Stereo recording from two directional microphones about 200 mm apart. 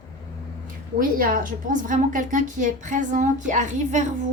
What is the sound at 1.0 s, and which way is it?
A woman's voice, 45° right (ahead or behind).